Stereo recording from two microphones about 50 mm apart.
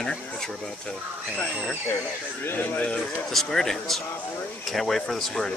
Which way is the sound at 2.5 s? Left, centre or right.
Left.